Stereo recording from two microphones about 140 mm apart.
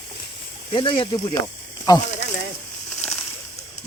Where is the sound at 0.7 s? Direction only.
35° left (ahead or behind).